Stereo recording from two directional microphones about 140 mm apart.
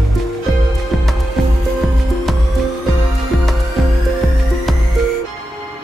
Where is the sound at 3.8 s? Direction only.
Centre (ahead or behind).